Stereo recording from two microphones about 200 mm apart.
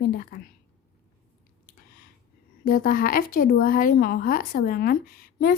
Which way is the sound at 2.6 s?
45° left (ahead or behind).